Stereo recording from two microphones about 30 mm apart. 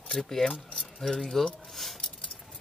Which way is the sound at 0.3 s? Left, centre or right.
Centre.